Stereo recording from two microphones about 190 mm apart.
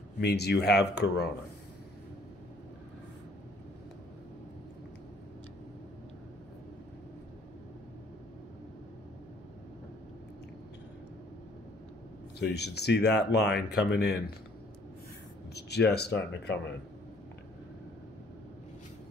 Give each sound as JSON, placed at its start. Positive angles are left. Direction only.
{"t": 0.2, "sound": "speech", "side_deg": 60}
{"t": 12.4, "sound": "speech", "side_deg": 60}
{"t": 15.5, "sound": "speech", "side_deg": 60}